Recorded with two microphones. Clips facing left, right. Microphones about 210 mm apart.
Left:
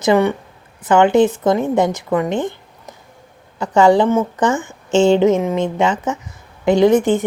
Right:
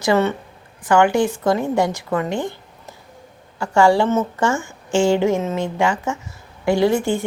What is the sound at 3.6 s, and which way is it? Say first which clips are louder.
A woman's voice: left 3 dB; 20° left (ahead or behind).